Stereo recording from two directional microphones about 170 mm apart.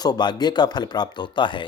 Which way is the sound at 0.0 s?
25° left (ahead or behind).